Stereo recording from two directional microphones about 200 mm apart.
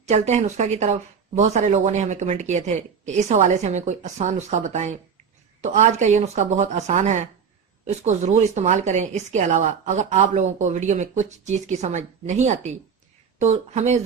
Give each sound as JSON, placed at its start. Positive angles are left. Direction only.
{"t": 0.0, "sound": "speech", "side_deg": -35}